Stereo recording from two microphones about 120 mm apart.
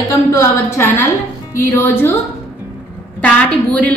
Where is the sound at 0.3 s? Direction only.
20° left (ahead or behind).